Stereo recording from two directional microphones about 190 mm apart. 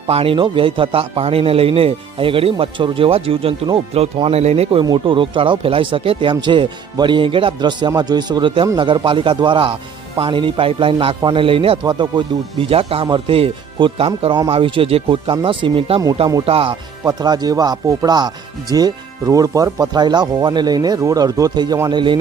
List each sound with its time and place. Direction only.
0.1 s a man's voice: 30° right (ahead or behind)